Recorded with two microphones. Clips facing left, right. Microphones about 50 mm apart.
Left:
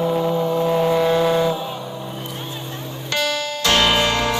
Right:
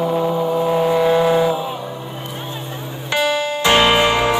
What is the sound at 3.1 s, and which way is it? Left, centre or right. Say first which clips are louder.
Music: right 5 dB; centre.